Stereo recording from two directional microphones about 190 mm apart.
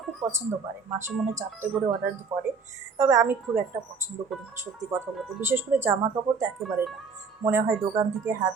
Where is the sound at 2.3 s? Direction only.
15° right (ahead or behind).